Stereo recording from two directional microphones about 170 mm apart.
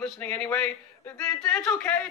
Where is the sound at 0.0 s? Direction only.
5° left (ahead or behind).